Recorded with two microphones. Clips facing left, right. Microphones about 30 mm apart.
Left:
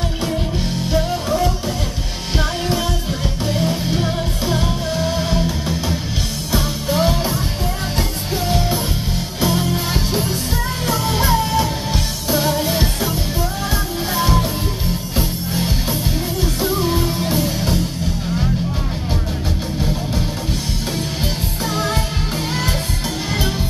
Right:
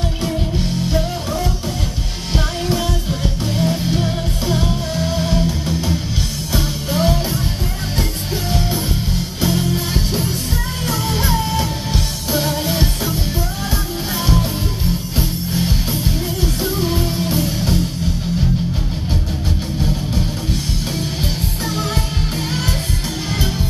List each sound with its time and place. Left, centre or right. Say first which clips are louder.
0.8 s music: left 1 dB; centre
9.4 s music: left 1 dB; centre
21.6 s music: left 2 dB; centre